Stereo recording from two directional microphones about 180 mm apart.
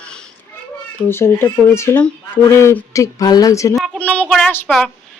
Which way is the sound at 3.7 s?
5° left (ahead or behind).